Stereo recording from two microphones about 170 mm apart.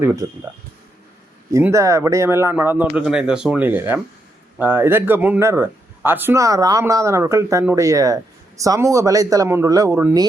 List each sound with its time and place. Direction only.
0.0 s speech: 15° right (ahead or behind)
1.5 s speech: 15° right (ahead or behind)